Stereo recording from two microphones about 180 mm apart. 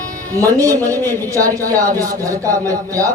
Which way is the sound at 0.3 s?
20° right (ahead or behind).